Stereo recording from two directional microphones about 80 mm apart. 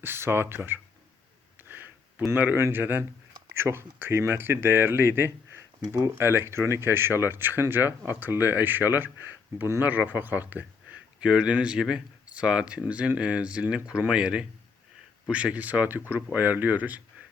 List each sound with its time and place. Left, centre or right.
0.0 s speech: right
1.6 s a sound: right
2.6 s speech: right